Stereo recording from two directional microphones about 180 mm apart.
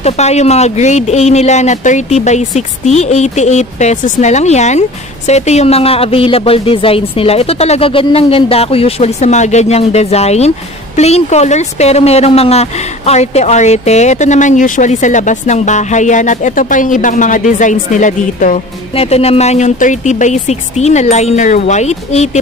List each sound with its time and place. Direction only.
0.0 s speech: 35° left (ahead or behind)